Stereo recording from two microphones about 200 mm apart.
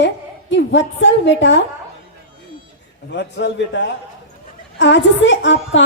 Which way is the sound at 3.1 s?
60° left (ahead or behind).